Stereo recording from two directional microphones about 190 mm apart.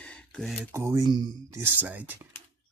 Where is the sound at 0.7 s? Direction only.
15° right (ahead or behind).